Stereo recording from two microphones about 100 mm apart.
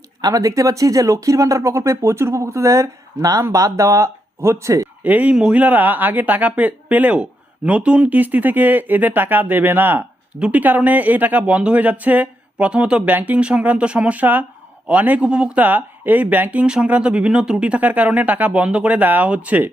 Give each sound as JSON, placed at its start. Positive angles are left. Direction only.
{"t": 0.2, "sound": "speech", "side_deg": -40}
{"t": 5.0, "sound": "speech", "side_deg": -15}